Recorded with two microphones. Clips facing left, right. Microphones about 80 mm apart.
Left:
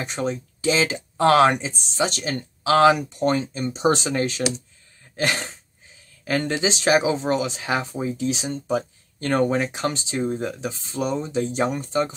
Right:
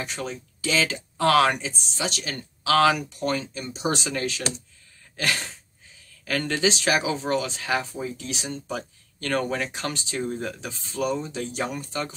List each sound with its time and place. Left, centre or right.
0.0 s speech: left
5.1 s dog: left
6.2 s speech: left